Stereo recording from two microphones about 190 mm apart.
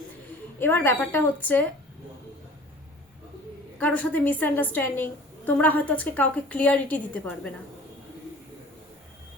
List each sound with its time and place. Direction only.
0.6 s a woman's voice: 10° left (ahead or behind)
3.8 s a woman's voice: 5° left (ahead or behind)